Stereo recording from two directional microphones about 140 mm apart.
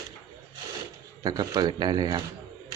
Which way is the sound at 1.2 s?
25° right (ahead or behind).